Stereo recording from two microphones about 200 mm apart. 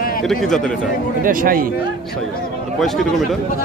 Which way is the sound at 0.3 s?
Centre (ahead or behind).